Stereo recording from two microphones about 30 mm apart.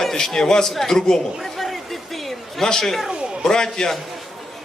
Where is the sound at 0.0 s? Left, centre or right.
Centre.